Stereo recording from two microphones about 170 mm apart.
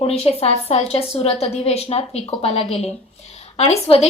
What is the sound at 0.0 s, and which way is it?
A woman's voice, 35° left (ahead or behind).